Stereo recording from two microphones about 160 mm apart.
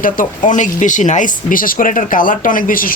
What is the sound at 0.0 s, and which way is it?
Speech, 55° left (ahead or behind).